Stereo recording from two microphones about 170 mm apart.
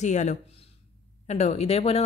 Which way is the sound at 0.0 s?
45° left (ahead or behind).